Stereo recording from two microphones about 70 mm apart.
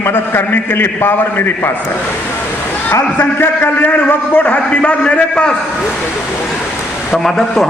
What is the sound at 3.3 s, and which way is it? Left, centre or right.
A man's voice, left.